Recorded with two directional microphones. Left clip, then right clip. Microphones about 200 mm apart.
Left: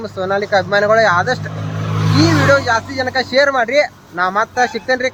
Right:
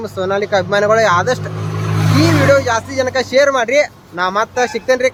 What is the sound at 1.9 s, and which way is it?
Vehicle, 60° right (ahead or behind).